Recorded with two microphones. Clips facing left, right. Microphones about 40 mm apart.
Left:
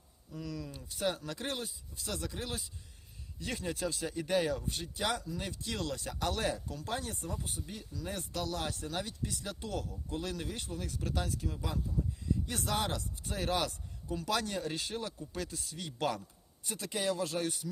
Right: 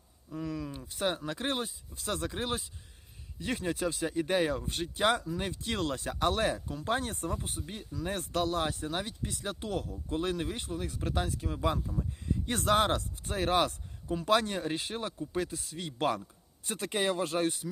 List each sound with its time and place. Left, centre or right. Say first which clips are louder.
0.3 s speech: right 5 dB; right
8.6 s speech: right 4 dB; right
9.6 s speech: right 3 dB; right
10.1 s speech: right 7 dB; right
11.6 s speech: right 8 dB; right
16.6 s speech: right 4 dB; right